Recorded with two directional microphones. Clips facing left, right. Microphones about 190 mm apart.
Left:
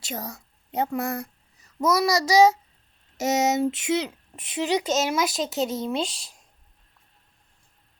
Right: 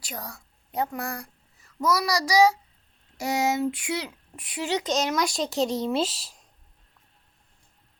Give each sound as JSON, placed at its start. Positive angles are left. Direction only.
{"t": 0.0, "sound": "a woman's voice", "side_deg": 20}